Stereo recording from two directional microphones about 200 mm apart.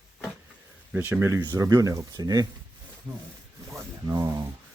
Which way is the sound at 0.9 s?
10° right (ahead or behind).